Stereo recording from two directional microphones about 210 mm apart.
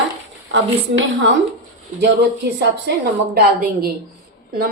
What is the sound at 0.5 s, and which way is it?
Speech, 60° right (ahead or behind).